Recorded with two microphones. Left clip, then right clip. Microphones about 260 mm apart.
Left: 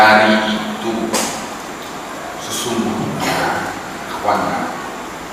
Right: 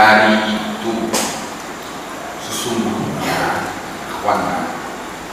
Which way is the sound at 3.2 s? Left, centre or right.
Centre.